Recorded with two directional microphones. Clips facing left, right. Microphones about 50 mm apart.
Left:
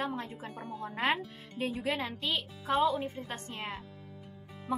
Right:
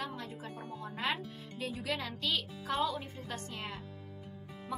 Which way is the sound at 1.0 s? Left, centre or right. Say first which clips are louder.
Left 5 dB; left.